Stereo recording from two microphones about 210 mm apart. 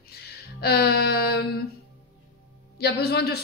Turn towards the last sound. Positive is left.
turn(degrees=50)  # may be behind; listen again after turning